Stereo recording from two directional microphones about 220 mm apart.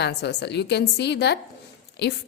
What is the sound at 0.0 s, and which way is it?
A woman's voice, 50° left (ahead or behind).